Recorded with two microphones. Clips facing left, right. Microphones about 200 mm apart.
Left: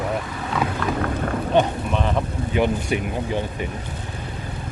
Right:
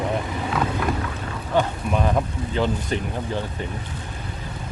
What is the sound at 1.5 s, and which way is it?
Speech, 20° left (ahead or behind).